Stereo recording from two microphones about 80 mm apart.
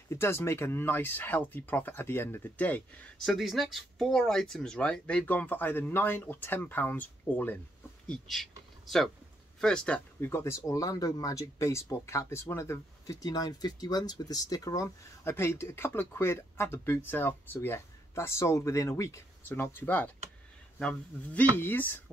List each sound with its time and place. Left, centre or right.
0.1 s speech: left
3.2 s speech: centre; by 7.5 s left
8.1 s speech: centre
10.2 s speech: left
10.7 s speech: left
13.0 s speech: left
15.2 s speech: left